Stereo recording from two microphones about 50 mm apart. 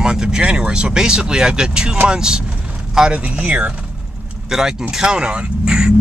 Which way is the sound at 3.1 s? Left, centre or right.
Right.